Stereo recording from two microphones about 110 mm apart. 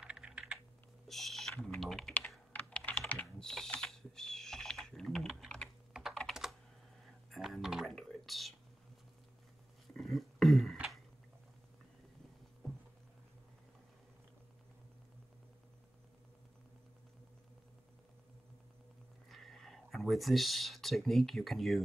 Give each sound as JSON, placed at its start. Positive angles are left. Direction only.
{"t": 0.0, "sound": "computer keyboard", "side_deg": -5}
{"t": 1.0, "sound": "a sound", "side_deg": 0}
{"t": 1.6, "sound": "typing", "side_deg": 0}
{"t": 2.5, "sound": "computer keyboard", "side_deg": 15}
{"t": 3.4, "sound": "typing", "side_deg": 5}
{"t": 7.2, "sound": "whispering", "side_deg": 0}
{"t": 9.9, "sound": "a sound", "side_deg": 0}
{"t": 19.2, "sound": "speech", "side_deg": 0}